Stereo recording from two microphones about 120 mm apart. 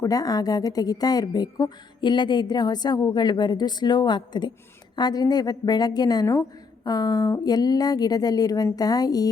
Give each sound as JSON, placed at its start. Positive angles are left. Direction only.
{"t": 0.0, "sound": "a woman's voice", "side_deg": 30}